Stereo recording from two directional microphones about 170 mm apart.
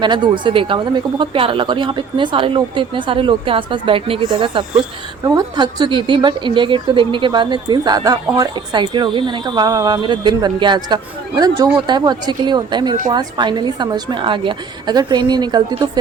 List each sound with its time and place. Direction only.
0.0 s a woman's voice: 25° right (ahead or behind)